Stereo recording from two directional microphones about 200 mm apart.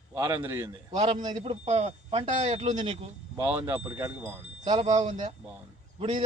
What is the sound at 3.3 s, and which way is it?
Speech, 10° right (ahead or behind).